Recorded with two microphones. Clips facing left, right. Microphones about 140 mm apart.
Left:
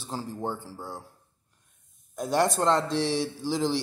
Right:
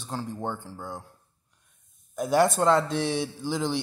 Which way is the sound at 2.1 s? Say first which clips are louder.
Right 3 dB; 5° right (ahead or behind).